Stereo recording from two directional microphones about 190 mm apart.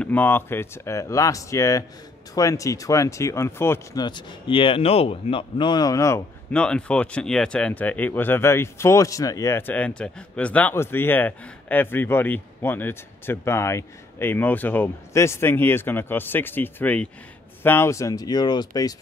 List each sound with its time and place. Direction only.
0.0 s speech: 10° left (ahead or behind)